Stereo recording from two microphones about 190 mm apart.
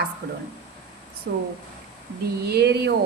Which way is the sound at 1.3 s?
50° right (ahead or behind).